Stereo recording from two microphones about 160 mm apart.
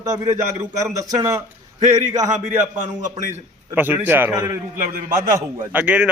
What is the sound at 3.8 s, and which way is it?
A man's voice, 10° right (ahead or behind).